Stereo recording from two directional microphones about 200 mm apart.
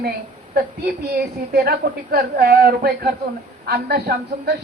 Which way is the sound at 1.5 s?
50° right (ahead or behind).